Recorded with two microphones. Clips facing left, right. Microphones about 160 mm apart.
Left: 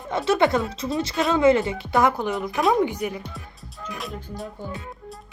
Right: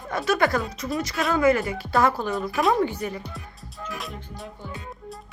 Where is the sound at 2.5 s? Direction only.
Centre (ahead or behind).